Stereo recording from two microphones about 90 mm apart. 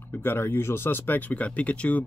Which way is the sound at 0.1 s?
25° left (ahead or behind).